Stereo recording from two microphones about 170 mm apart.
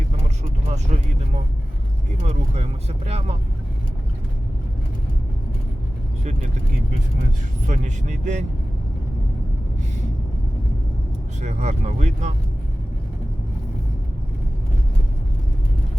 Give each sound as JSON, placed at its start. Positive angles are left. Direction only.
{"t": 0.7, "sound": "speech", "side_deg": -40}
{"t": 3.1, "sound": "speech", "side_deg": -40}
{"t": 7.7, "sound": "speech", "side_deg": -45}
{"t": 11.3, "sound": "speech", "side_deg": -45}